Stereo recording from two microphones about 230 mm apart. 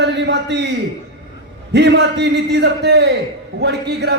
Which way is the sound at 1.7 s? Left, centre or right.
Right.